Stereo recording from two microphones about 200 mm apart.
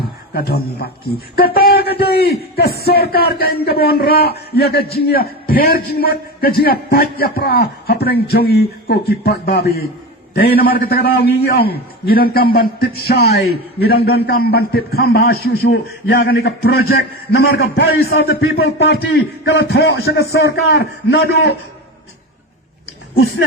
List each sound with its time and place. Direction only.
0.3 s a man's voice: 50° left (ahead or behind); by 20.1 s 80° left
20.4 s a man's voice: 55° left (ahead or behind)